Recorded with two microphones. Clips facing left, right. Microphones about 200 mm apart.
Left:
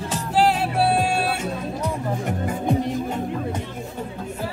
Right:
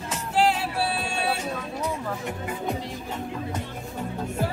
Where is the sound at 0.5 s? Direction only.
55° left (ahead or behind).